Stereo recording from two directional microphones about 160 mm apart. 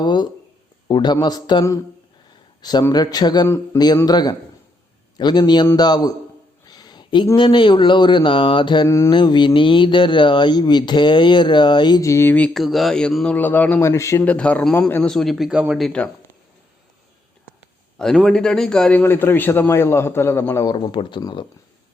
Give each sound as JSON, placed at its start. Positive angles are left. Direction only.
{"t": 0.0, "sound": "a sound", "side_deg": 25}
{"t": 0.9, "sound": "a man's voice", "side_deg": 25}
{"t": 6.7, "sound": "a sound", "side_deg": 25}
{"t": 7.3, "sound": "speech", "side_deg": 30}
{"t": 8.9, "sound": "speech", "side_deg": 20}
{"t": 9.1, "sound": "speech", "side_deg": 30}
{"t": 12.5, "sound": "a man's voice", "side_deg": 0}
{"t": 17.9, "sound": "a man's voice", "side_deg": 5}